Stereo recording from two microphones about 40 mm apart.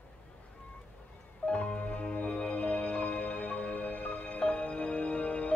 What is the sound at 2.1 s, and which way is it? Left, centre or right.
Music, left.